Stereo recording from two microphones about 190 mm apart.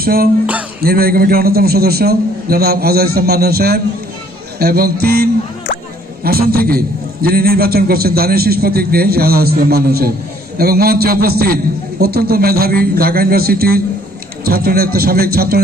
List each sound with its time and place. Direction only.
0.0 s music: 50° right (ahead or behind)
0.8 s a man's voice: 50° right (ahead or behind)